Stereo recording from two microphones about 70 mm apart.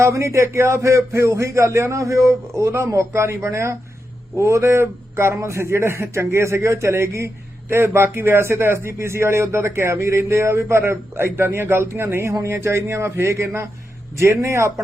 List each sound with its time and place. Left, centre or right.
0.0 s a man's voice: right